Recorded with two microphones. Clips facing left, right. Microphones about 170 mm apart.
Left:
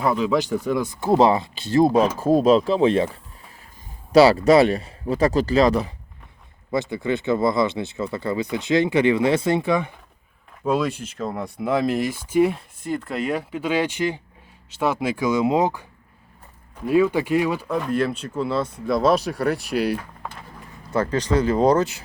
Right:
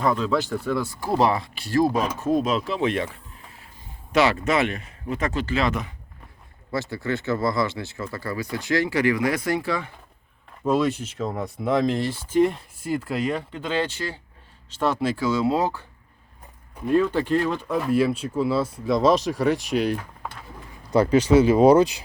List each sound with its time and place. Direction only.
0.0 s speech: 10° left (ahead or behind); by 3.1 s 30° left (ahead or behind)
4.1 s speech: 35° left (ahead or behind)
6.9 s speech: 20° left (ahead or behind)
10.6 s speech: centre (ahead or behind)
17.7 s speech: 5° right (ahead or behind)
20.9 s speech: 10° right (ahead or behind)